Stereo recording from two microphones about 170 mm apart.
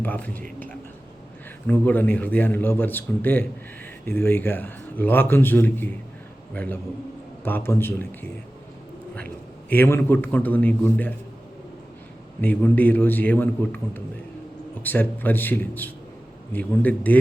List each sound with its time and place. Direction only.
0.0 s a man's voice: 10° left (ahead or behind)
1.6 s a man's voice: 10° left (ahead or behind)
9.6 s a man's voice: 10° left (ahead or behind)
12.4 s a man's voice: 10° left (ahead or behind)